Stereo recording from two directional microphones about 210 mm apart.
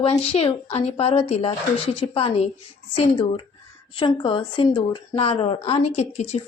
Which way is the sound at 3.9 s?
25° left (ahead or behind).